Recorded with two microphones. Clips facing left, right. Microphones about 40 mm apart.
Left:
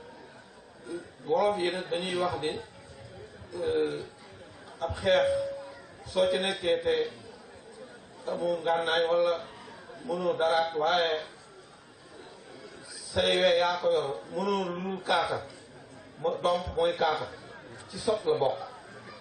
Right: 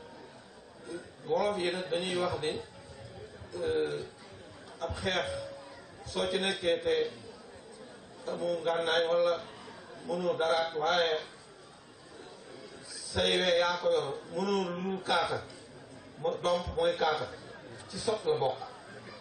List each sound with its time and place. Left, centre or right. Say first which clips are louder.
0.8 s a man's voice: left 3 dB; centre
8.3 s a man's voice: left 3 dB; centre
13.1 s a man's voice: left 3 dB; centre